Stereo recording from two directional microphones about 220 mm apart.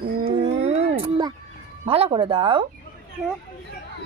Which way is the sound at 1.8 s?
25° right (ahead or behind).